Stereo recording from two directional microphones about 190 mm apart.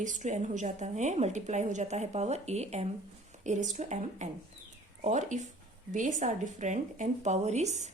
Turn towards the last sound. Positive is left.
turn(degrees=-35)  # may be behind; listen again after turning